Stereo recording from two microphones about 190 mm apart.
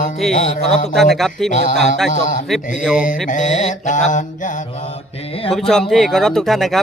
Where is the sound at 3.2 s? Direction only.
40° left (ahead or behind).